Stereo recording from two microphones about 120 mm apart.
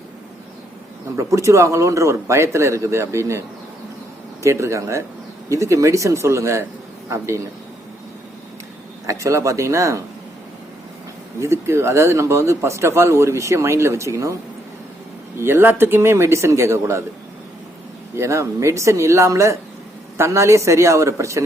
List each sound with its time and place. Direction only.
1.1 s speech: 25° right (ahead or behind)
4.4 s speech: 25° right (ahead or behind)
9.0 s speech: 25° right (ahead or behind)
11.3 s speech: 25° right (ahead or behind)
15.4 s speech: 20° right (ahead or behind)
18.2 s speech: 25° right (ahead or behind)